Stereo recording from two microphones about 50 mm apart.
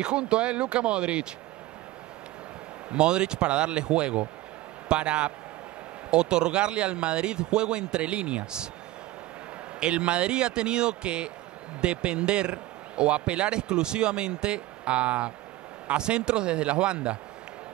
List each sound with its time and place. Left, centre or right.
0.0 s speech: centre
2.9 s speech: centre
9.8 s speech: right